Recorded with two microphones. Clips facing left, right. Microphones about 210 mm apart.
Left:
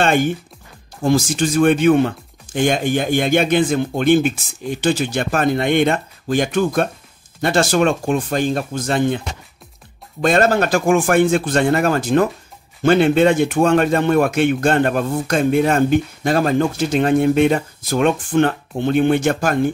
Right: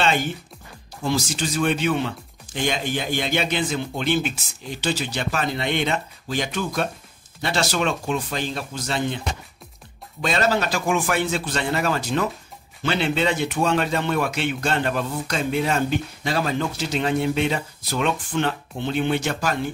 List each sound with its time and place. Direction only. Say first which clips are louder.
0.0 s speech: left 6 dB; 50° left (ahead or behind)
10.2 s speech: left 7 dB; 50° left (ahead or behind)